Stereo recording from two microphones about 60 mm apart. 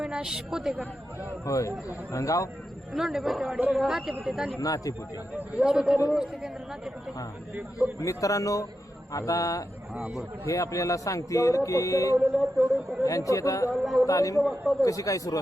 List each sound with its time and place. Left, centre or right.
0.0 s a woman's voice: centre
1.5 s a man's voice: left
2.9 s a man's voice: centre
4.6 s speech: left
5.5 s speech: centre
7.9 s speech: left
9.9 s a man's voice: centre
10.4 s speech: left
12.4 s a sound: centre
13.1 s speech: left
13.8 s a man's voice: centre
14.1 s speech: left